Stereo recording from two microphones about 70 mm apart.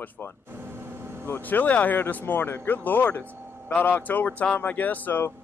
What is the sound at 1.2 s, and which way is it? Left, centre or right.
Speech, left.